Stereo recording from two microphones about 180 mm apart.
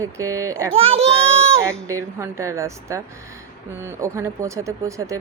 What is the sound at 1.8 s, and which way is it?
A woman's voice, 15° right (ahead or behind).